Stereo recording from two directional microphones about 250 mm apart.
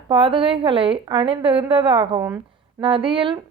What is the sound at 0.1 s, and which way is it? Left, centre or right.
Speech, centre.